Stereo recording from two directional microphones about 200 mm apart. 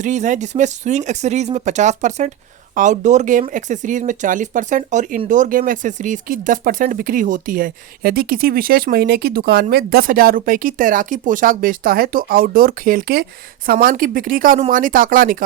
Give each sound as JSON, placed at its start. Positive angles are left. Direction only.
{"t": 0.0, "sound": "speech", "side_deg": -35}